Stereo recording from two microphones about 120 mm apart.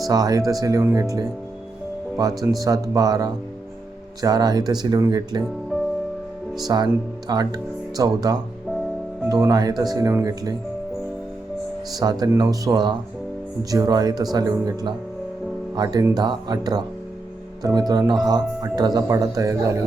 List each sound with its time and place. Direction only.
0.0 s speech: 30° right (ahead or behind)
2.3 s speech: centre (ahead or behind)
2.6 s speech: 30° right (ahead or behind)
6.7 s speech: 35° right (ahead or behind)
11.9 s speech: 30° right (ahead or behind)